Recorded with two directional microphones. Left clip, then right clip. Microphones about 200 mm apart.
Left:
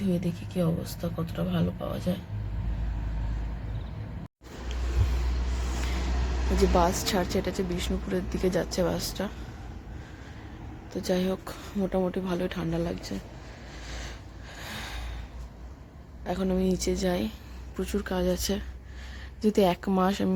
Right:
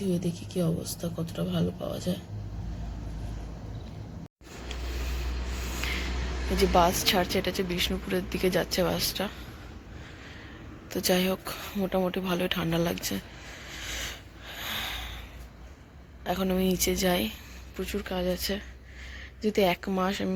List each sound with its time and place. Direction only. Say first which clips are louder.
0.1 s speech: even; 5° right (ahead or behind)
6.6 s speech: right 2 dB; 5° left (ahead or behind)
10.9 s speech: right 2 dB; 5° right (ahead or behind)
13.8 s a sound: right 7 dB; 5° right (ahead or behind)
16.2 s speech: right 1 dB; centre (ahead or behind)
17.7 s speech: left 2 dB; 20° left (ahead or behind)